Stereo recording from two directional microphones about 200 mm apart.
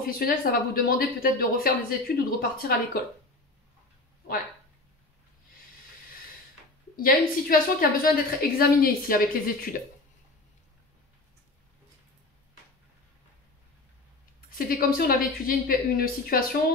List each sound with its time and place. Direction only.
0.0 s speech: 45° left (ahead or behind)
7.0 s speech: 45° left (ahead or behind)
14.5 s speech: 45° left (ahead or behind)